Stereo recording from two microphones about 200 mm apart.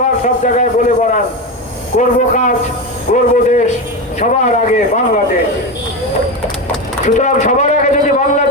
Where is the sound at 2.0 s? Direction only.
35° left (ahead or behind).